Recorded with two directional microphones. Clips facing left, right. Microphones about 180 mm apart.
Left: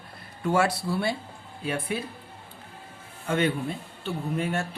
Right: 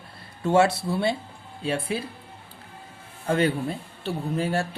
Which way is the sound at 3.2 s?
35° right (ahead or behind).